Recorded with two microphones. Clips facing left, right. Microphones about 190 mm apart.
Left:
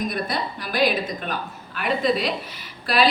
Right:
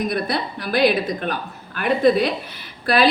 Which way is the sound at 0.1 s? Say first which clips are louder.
Right 4 dB; 60° right (ahead or behind).